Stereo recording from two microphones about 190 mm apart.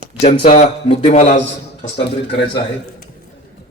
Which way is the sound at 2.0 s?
60° left (ahead or behind).